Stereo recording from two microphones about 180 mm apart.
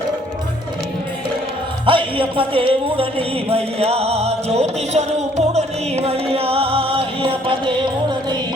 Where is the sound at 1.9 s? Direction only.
30° right (ahead or behind).